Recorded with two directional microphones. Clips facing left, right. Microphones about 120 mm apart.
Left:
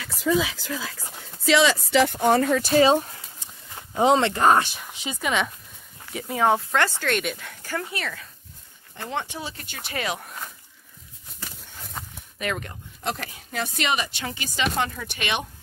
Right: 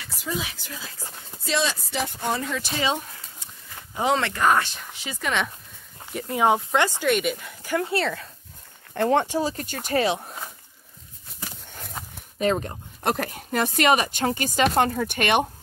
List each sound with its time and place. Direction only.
1.4 s speech: 90° left
2.1 s speech: 50° left (ahead or behind)
3.7 s speech: 25° left (ahead or behind)
4.6 s speech: 15° left (ahead or behind)
5.2 s speech: 5° left (ahead or behind)
6.4 s speech: 15° right (ahead or behind)
7.2 s speech: 5° right (ahead or behind)
7.6 s speech: 20° right (ahead or behind)
7.9 s speech: 30° right (ahead or behind)
8.9 s speech: 55° right (ahead or behind)
9.3 s speech: 40° right (ahead or behind)
10.0 s speech: 30° right (ahead or behind)
12.4 s speech: 30° right (ahead or behind)
13.0 s speech: 50° right (ahead or behind)